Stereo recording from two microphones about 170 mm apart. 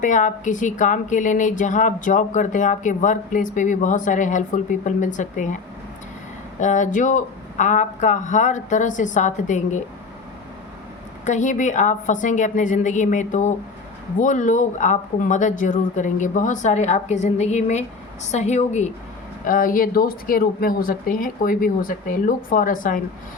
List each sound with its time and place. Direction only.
0.0 s a woman's voice: 45° left (ahead or behind)
6.6 s a woman's voice: 45° left (ahead or behind)
11.3 s a woman's voice: 45° left (ahead or behind)
19.5 s a woman's voice: 55° left (ahead or behind)